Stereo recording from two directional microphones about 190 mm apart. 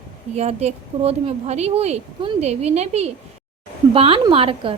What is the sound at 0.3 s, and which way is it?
A woman's voice, 35° right (ahead or behind).